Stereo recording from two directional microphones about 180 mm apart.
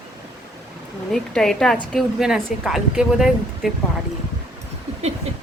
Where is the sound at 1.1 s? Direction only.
5° left (ahead or behind).